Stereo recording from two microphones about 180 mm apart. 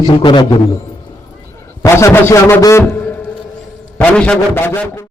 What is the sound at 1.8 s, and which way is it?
A man's voice, 15° left (ahead or behind).